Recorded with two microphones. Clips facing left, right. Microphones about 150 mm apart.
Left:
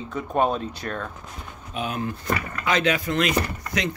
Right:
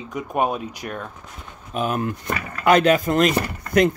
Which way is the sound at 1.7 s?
50° right (ahead or behind).